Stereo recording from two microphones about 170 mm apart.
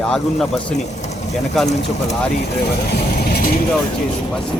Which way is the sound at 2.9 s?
65° left (ahead or behind).